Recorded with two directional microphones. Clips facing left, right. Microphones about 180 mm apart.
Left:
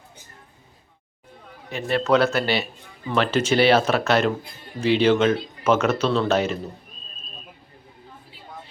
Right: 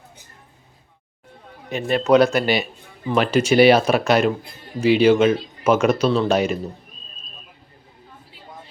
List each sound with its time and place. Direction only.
1.7 s speech: 15° right (ahead or behind)